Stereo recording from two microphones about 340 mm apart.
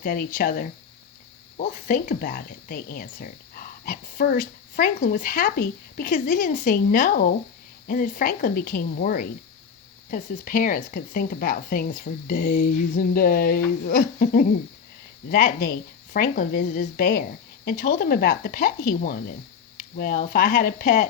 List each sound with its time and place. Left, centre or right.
0.0 s speech: left